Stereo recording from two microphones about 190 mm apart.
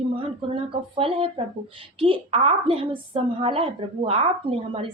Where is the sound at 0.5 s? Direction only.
30° right (ahead or behind).